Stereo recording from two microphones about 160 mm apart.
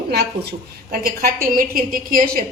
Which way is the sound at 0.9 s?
65° right (ahead or behind).